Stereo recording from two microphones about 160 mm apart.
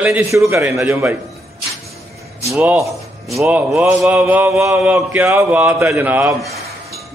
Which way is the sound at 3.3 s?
5° right (ahead or behind).